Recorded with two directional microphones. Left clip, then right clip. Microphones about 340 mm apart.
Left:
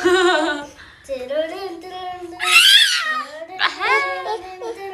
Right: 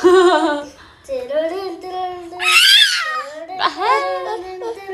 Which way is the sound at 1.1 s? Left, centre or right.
Right.